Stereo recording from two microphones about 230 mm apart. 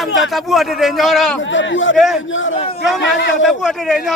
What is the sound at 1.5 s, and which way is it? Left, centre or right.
Speech, left.